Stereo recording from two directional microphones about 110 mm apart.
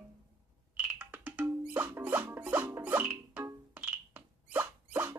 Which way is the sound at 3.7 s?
15° right (ahead or behind).